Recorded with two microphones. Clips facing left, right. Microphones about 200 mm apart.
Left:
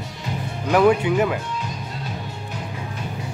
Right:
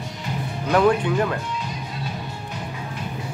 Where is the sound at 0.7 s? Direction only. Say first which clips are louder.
Left 2 dB; 10° left (ahead or behind).